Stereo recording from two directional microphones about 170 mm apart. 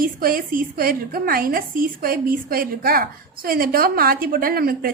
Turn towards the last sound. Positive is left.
turn(degrees=-60)  # may be behind; listen again after turning